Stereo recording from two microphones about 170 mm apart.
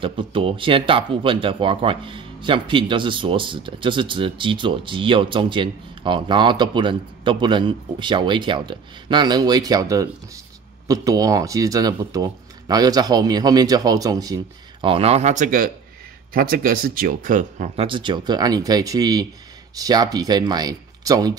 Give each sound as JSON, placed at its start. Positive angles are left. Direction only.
{"t": 0.0, "sound": "speech", "side_deg": -30}
{"t": 17.8, "sound": "speech", "side_deg": -30}